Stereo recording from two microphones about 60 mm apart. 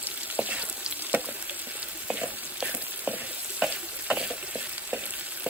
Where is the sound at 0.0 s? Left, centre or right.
Right.